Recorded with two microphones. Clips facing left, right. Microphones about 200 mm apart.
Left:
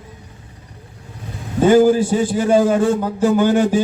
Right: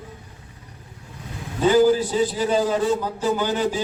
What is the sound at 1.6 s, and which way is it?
A man's voice, 50° left (ahead or behind).